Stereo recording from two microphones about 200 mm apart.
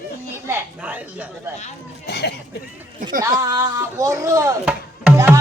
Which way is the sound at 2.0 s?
55° left (ahead or behind).